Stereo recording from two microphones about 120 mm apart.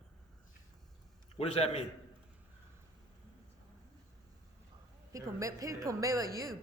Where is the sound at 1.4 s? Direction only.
60° left (ahead or behind).